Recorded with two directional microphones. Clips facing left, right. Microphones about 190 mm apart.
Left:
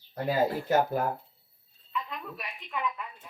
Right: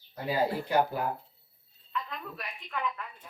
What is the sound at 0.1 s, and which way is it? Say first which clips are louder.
Speech: left 2 dB; 45° left (ahead or behind).